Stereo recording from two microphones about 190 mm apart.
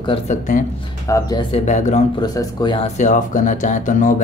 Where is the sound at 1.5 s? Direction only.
40° left (ahead or behind).